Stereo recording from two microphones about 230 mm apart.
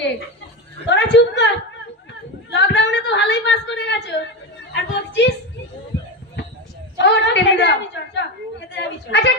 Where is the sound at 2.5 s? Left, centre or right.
Left.